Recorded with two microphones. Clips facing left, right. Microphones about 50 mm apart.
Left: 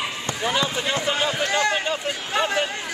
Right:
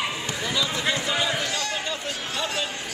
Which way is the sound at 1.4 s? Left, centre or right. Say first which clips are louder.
Left 6 dB; left.